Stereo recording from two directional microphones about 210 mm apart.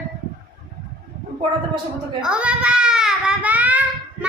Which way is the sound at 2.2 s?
5° right (ahead or behind).